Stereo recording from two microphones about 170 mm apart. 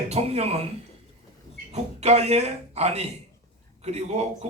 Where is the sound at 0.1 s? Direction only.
40° right (ahead or behind).